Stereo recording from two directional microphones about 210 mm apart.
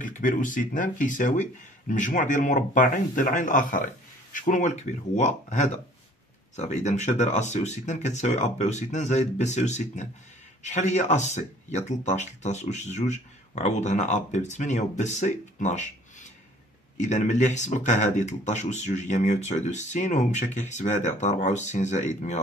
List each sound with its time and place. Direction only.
0.0 s speech: 40° left (ahead or behind)